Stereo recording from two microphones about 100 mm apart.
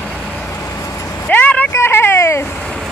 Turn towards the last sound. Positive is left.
turn(degrees=25)  # may be behind; listen again after turning